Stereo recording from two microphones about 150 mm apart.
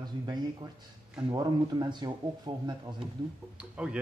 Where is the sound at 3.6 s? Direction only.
5° right (ahead or behind).